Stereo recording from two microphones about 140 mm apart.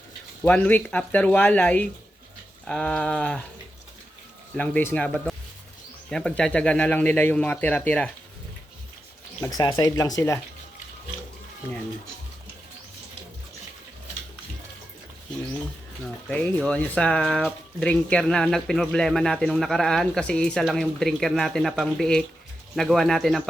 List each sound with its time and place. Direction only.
0.4 s speech: 10° left (ahead or behind)
4.5 s speech: 10° left (ahead or behind)
9.4 s speech: 25° left (ahead or behind)
16.0 s speech: 10° left (ahead or behind)